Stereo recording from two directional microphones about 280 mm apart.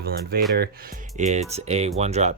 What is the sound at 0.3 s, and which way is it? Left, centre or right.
Speech, right.